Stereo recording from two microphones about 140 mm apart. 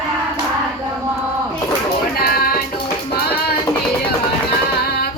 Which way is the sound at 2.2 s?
90° left.